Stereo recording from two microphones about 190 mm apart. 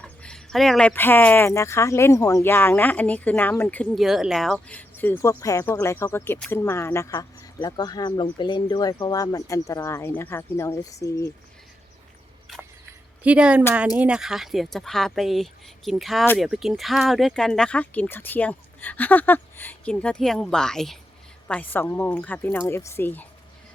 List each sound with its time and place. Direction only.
0.0 s speech: 5° left (ahead or behind)
12.5 s a sound: centre (ahead or behind)
13.2 s speech: 5° right (ahead or behind); by 23.2 s 10° left (ahead or behind)